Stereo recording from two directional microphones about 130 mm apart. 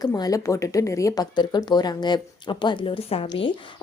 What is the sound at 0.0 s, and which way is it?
Speech, 30° left (ahead or behind).